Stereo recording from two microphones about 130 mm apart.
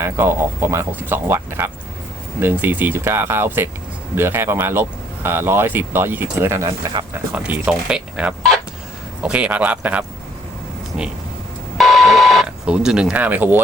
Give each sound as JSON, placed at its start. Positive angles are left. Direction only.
{"t": 0.0, "sound": "speech", "side_deg": -20}
{"t": 6.7, "sound": "speech", "side_deg": -30}
{"t": 7.1, "sound": "speech", "side_deg": -10}
{"t": 11.8, "sound": "a sound", "side_deg": 0}